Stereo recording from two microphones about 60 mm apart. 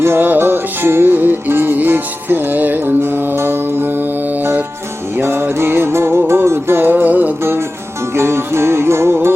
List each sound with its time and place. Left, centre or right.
0.0 s music: right
5.1 s music: right
8.1 s music: right